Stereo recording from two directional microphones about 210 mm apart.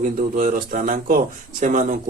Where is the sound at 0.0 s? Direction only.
40° right (ahead or behind).